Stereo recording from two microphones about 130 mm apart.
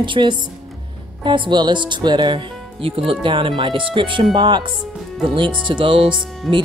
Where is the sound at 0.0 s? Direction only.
40° right (ahead or behind).